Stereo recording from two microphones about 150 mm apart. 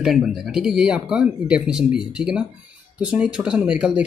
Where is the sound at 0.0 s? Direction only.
Centre (ahead or behind).